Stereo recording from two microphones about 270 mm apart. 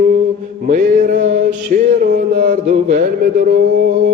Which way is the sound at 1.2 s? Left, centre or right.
Right.